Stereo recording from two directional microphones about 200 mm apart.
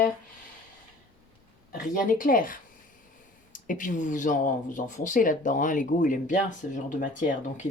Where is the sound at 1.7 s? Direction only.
45° left (ahead or behind).